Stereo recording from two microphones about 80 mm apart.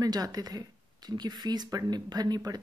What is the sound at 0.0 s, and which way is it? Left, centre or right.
A woman's voice, right.